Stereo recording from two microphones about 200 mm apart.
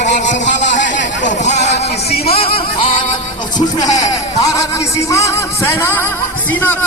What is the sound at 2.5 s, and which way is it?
Music, 45° left (ahead or behind).